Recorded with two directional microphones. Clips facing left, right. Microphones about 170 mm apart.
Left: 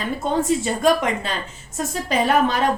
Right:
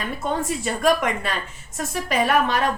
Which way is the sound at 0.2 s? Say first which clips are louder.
Left 6 dB; 25° left (ahead or behind).